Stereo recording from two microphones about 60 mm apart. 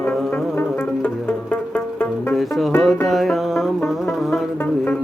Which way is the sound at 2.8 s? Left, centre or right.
Centre.